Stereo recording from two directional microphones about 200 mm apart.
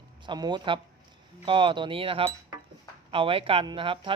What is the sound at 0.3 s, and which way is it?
Speech, 20° right (ahead or behind).